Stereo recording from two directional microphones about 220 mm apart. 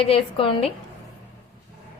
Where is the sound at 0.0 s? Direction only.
25° left (ahead or behind).